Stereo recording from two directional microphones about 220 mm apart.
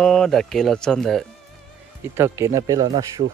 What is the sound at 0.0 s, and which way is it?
Speech, 5° left (ahead or behind).